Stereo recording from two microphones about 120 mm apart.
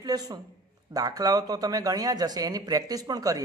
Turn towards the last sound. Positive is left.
turn(degrees=-30)  # may be behind; listen again after turning